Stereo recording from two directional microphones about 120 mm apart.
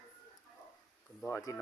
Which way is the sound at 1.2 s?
25° left (ahead or behind).